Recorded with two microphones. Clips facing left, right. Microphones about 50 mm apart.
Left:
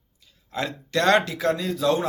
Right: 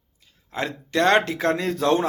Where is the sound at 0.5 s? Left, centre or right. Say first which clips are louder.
Right 2 dB; right.